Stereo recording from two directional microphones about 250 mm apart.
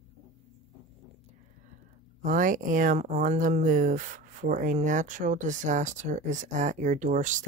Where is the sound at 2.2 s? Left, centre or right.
Right.